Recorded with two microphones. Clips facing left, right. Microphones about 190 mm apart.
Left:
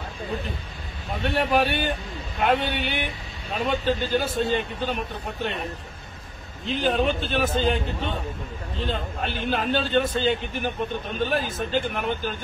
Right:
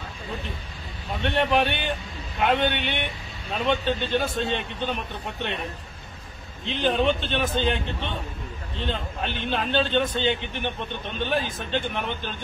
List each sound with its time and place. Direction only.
1.2 s a man's voice: 5° left (ahead or behind)
6.6 s a man's voice: 5° left (ahead or behind)
8.8 s a man's voice: 5° left (ahead or behind)